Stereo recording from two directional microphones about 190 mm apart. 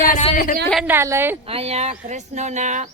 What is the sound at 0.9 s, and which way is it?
Speech, 15° right (ahead or behind).